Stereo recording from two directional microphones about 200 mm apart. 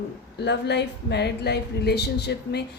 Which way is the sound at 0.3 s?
55° left (ahead or behind).